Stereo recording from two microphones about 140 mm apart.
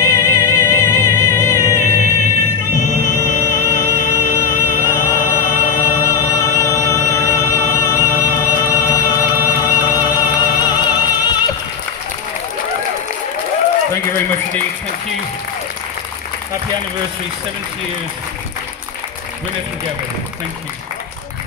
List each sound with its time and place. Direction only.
0.0 s music: 25° left (ahead or behind)